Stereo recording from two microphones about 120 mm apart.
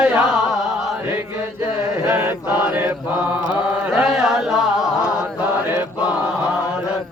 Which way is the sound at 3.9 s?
5° right (ahead or behind).